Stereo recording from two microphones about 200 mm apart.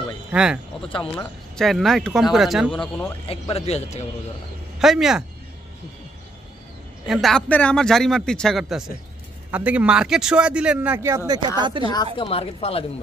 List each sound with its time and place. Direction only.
0.3 s a man's voice: 5° right (ahead or behind)
3.3 s speech: 30° left (ahead or behind)
4.7 s speech: centre (ahead or behind)
7.1 s a man's voice: centre (ahead or behind); by 11.8 s 20° right (ahead or behind)
11.8 s a woman's voice: 20° left (ahead or behind)